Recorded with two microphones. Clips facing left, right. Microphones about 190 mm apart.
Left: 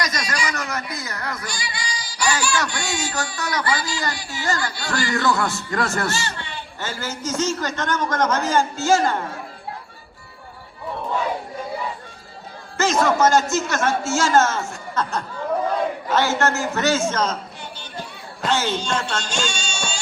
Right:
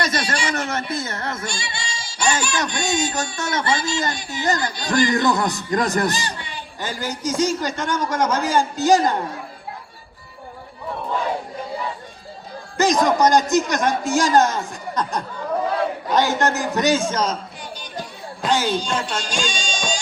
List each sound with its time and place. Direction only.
0.0 s speech: 30° right (ahead or behind)
12.7 s a man's voice: 15° right (ahead or behind)
18.4 s a man's voice: 10° right (ahead or behind)